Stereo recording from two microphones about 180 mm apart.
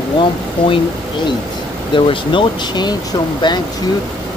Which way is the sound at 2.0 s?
25° left (ahead or behind).